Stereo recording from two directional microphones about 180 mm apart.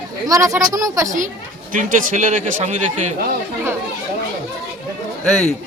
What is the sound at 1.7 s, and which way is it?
A man's voice, 45° right (ahead or behind).